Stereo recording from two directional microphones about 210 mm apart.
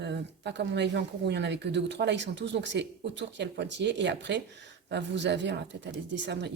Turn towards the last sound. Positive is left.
turn(degrees=-55)  # may be behind; listen again after turning